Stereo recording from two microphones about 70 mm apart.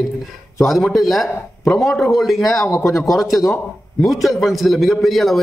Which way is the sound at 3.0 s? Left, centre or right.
Centre.